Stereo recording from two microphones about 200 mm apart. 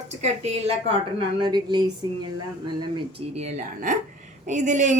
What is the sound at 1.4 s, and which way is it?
Speech, 20° right (ahead or behind).